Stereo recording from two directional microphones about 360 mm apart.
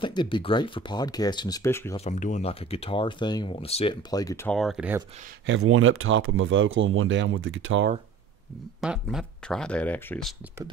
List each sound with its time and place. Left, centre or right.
0.0 s speech: centre
5.5 s speech: right
8.8 s speech: centre